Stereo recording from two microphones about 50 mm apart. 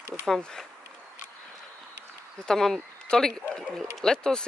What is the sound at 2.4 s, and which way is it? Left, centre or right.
Speech, centre.